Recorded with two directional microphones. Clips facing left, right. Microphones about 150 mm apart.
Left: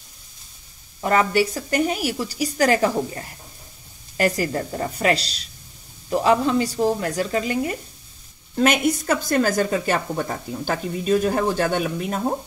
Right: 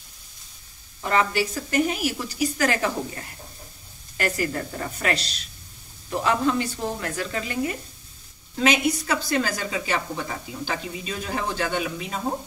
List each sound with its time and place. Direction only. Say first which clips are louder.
1.0 s speech: left 4 dB; 40° left (ahead or behind)
8.6 s a woman's voice: left 2 dB; 50° left (ahead or behind)